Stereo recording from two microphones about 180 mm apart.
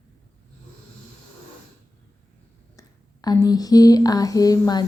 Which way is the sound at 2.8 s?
20° left (ahead or behind).